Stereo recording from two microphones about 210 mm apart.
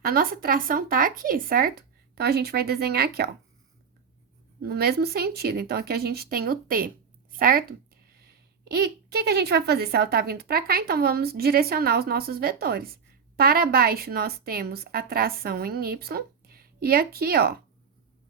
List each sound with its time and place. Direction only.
0.0 s a woman's voice: 45° right (ahead or behind)
4.6 s a woman's voice: 50° right (ahead or behind)